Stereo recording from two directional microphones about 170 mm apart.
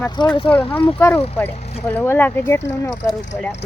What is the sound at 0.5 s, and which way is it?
Speech, 10° left (ahead or behind).